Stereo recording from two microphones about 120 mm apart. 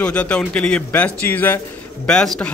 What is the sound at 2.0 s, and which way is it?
Speech, 5° left (ahead or behind).